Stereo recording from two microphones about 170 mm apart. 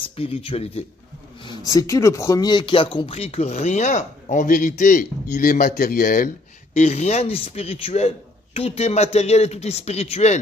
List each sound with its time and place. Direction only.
0.1 s speech: 35° left (ahead or behind)
1.4 s speech: 25° left (ahead or behind); by 6.3 s 55° left (ahead or behind)
6.7 s speech: 40° left (ahead or behind)